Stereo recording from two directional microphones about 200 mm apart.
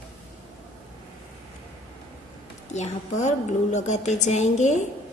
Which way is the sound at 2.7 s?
35° left (ahead or behind).